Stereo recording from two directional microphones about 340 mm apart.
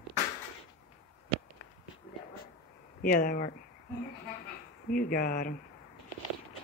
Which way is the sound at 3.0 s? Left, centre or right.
Left.